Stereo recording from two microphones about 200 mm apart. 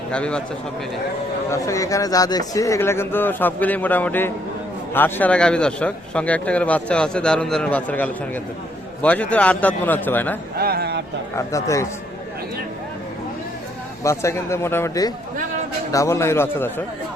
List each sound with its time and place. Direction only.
0.1 s a man's voice: 5° left (ahead or behind)
1.5 s a man's voice: 15° left (ahead or behind)
10.6 s speech: 50° right (ahead or behind)
11.3 s speech: 15° left (ahead or behind)
14.0 s speech: 15° left (ahead or behind)